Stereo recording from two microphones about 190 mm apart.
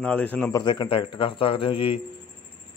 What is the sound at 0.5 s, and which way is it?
A man's voice, 25° left (ahead or behind).